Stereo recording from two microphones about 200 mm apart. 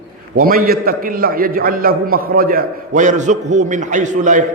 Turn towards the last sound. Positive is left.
turn(degrees=-40)  # may be behind; listen again after turning